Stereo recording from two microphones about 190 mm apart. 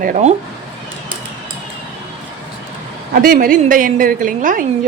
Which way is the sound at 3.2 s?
45° right (ahead or behind).